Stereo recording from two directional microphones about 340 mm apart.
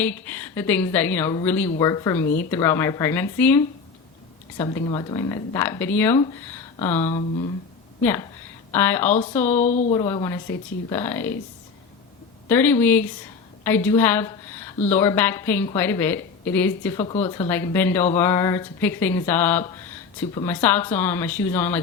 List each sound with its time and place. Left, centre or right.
0.0 s a woman's voice: centre
7.0 s speech: centre
8.7 s a woman's voice: centre
9.6 s a woman's voice: left
12.5 s a woman's voice: centre